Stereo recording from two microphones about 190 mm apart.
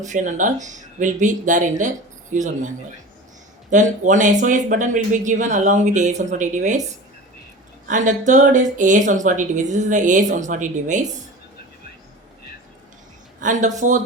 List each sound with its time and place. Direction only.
0.0 s speech: 40° right (ahead or behind)
7.9 s speech: 40° right (ahead or behind)
13.4 s speech: 40° right (ahead or behind)